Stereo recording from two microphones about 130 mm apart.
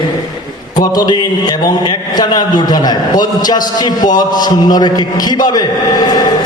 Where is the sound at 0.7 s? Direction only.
30° left (ahead or behind).